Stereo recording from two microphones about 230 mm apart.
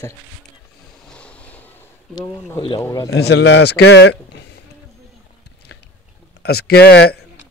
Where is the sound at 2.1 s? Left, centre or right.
Centre.